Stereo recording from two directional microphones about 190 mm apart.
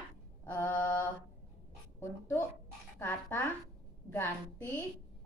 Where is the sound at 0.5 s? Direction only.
10° left (ahead or behind).